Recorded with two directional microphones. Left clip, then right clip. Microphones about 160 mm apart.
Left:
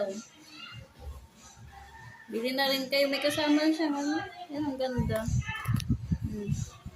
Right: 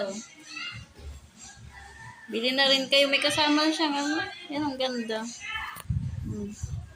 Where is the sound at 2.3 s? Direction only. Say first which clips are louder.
Right 6 dB; 15° left (ahead or behind).